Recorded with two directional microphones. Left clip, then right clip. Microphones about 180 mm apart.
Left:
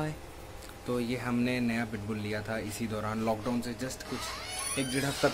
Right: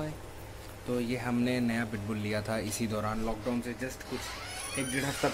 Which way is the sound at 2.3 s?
25° right (ahead or behind).